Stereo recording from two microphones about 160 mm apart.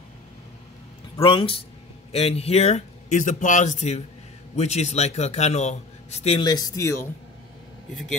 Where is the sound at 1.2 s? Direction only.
35° left (ahead or behind).